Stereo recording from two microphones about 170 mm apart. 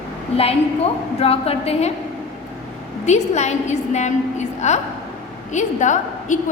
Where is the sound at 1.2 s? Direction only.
35° left (ahead or behind).